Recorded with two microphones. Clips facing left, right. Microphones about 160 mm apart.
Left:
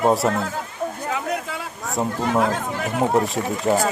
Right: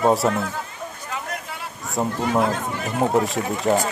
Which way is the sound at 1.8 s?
Centre (ahead or behind).